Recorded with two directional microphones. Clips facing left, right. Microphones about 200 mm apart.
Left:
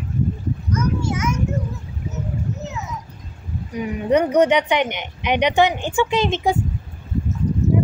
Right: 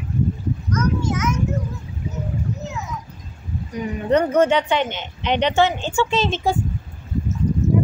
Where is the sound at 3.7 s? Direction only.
10° left (ahead or behind).